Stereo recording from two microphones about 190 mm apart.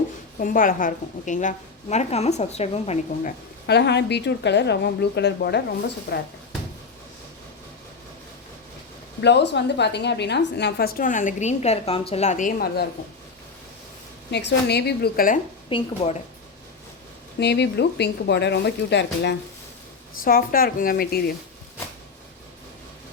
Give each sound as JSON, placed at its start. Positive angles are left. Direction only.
{"t": 0.3, "sound": "a woman's voice", "side_deg": 45}
{"t": 3.7, "sound": "a woman's voice", "side_deg": 60}
{"t": 9.2, "sound": "a woman's voice", "side_deg": 65}
{"t": 14.3, "sound": "a woman's voice", "side_deg": 60}
{"t": 15.7, "sound": "speech", "side_deg": 25}
{"t": 17.4, "sound": "a woman's voice", "side_deg": 60}
{"t": 20.2, "sound": "a woman's voice", "side_deg": 50}